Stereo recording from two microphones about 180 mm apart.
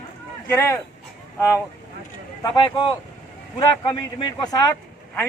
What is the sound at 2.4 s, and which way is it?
A man's voice, 25° left (ahead or behind).